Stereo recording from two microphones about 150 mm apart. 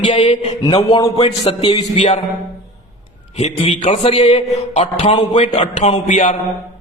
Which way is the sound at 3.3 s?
45° left (ahead or behind).